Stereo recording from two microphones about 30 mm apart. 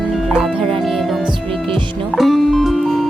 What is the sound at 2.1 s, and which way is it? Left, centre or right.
Music, centre.